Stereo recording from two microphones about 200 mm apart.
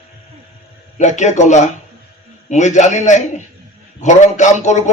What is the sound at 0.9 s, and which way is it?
A man's voice, 35° left (ahead or behind).